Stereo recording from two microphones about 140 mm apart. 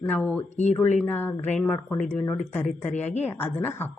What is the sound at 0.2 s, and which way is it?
Speech, 10° left (ahead or behind).